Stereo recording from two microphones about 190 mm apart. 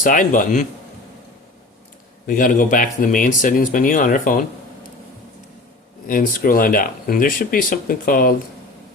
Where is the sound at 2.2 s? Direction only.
45° left (ahead or behind).